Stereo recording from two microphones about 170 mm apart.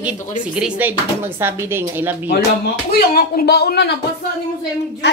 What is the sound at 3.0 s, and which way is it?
Speech, 65° left (ahead or behind).